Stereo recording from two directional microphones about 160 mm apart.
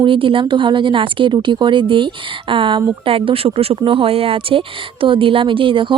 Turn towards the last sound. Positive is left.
turn(degrees=-30)  # may be behind; listen again after turning